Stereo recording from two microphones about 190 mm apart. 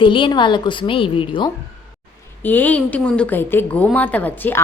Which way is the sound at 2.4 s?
10° left (ahead or behind).